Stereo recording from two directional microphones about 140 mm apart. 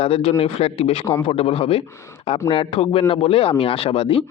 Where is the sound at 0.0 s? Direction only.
45° left (ahead or behind).